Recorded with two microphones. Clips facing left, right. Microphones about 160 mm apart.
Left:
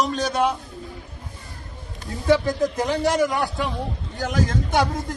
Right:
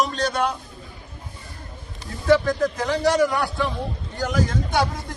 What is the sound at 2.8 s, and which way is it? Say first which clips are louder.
Speech: right 1 dB; 20° left (ahead or behind).